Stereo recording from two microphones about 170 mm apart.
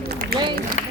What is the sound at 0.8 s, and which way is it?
Music, 50° left (ahead or behind).